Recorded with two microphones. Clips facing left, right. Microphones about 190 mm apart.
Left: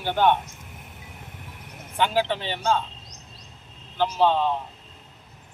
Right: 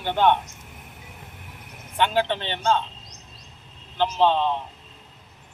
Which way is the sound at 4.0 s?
10° left (ahead or behind).